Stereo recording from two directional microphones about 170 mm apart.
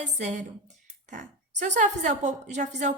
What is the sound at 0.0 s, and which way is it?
A woman's voice, 45° right (ahead or behind).